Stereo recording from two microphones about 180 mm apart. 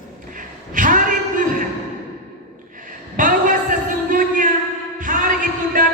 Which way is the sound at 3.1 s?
50° right (ahead or behind).